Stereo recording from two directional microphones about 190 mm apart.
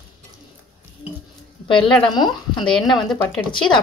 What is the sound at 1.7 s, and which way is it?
Speech, 25° left (ahead or behind).